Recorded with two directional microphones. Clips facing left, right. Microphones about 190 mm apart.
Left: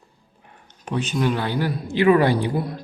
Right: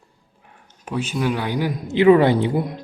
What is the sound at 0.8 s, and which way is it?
Speech, 5° right (ahead or behind).